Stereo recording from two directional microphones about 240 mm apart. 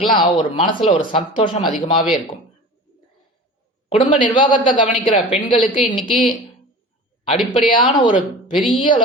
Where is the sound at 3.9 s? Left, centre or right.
Left.